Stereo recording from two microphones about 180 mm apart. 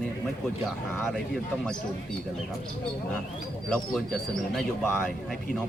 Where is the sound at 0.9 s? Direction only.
Centre (ahead or behind).